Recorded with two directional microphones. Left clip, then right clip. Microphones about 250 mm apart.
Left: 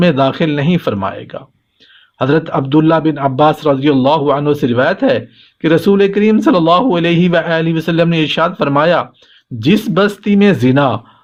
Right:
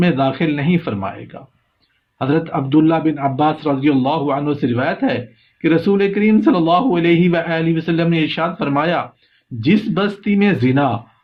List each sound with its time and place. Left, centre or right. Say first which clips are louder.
0.0 s a man's voice: left 5 dB; left